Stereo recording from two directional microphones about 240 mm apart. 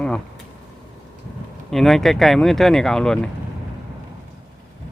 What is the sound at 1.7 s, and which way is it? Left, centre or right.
Speech, centre.